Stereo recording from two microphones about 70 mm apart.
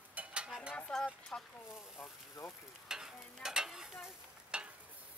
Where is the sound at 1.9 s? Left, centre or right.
Left.